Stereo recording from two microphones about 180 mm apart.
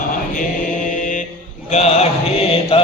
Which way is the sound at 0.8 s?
45° left (ahead or behind).